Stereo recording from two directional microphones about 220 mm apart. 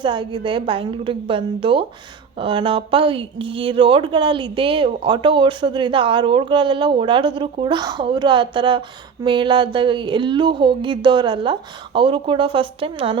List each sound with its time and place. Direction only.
0.0 s a woman's voice: 20° right (ahead or behind)